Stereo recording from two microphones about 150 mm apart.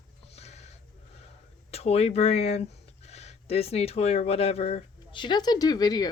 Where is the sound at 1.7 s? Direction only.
45° left (ahead or behind).